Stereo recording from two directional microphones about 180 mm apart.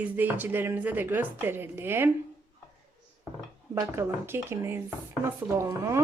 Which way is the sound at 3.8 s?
15° right (ahead or behind).